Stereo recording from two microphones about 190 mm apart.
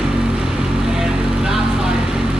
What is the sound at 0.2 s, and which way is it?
Vehicle, 5° right (ahead or behind).